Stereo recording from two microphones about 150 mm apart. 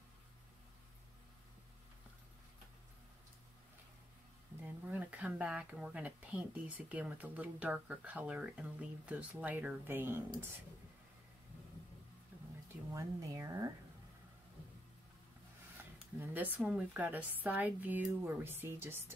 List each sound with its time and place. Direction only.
4.8 s speech: 10° right (ahead or behind)
12.3 s a sound: 10° right (ahead or behind)
12.9 s speech: 20° right (ahead or behind)
15.8 s speech: 10° right (ahead or behind)